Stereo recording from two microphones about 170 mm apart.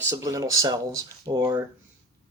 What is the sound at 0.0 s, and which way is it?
Speech, 20° right (ahead or behind).